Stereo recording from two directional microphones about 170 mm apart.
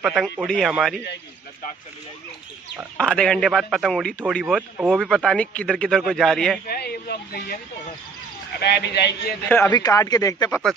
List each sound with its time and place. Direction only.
0.0 s a man's voice: centre (ahead or behind)
3.0 s a man's voice: 5° left (ahead or behind)
6.7 s speech: 65° left (ahead or behind)
8.5 s a man's voice: 80° left
9.7 s speech: 20° left (ahead or behind)